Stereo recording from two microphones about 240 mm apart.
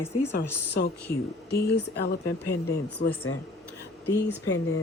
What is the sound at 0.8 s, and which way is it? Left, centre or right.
Speech, left.